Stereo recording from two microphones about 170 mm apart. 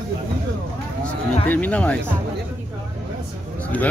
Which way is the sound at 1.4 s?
10° left (ahead or behind).